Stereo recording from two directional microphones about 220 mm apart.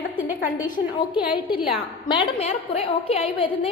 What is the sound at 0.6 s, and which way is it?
A woman's voice, 20° left (ahead or behind).